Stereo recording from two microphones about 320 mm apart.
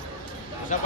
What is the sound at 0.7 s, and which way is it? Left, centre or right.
Speech, left.